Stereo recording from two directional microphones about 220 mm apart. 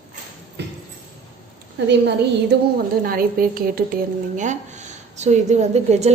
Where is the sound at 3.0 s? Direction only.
40° right (ahead or behind).